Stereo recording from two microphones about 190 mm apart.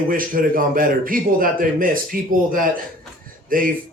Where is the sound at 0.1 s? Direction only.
45° right (ahead or behind).